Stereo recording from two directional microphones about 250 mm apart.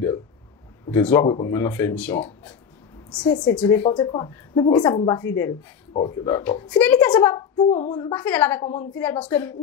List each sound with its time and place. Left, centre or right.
0.8 s speech: centre